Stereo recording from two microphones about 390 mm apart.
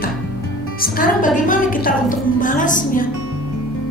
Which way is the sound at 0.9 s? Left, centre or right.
Centre.